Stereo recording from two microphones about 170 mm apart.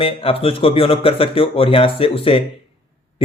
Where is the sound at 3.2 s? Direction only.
35° left (ahead or behind).